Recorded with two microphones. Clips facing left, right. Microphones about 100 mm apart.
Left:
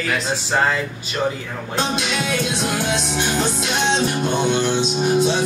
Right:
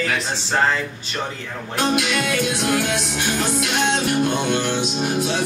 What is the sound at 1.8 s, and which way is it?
Music, 25° left (ahead or behind).